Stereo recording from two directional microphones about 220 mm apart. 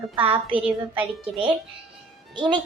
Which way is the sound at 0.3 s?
25° right (ahead or behind).